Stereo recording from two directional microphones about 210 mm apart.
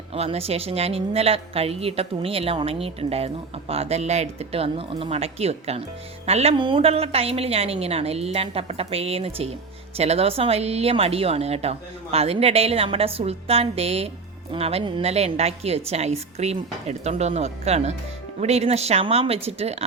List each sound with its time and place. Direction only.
0.1 s speech: 30° right (ahead or behind)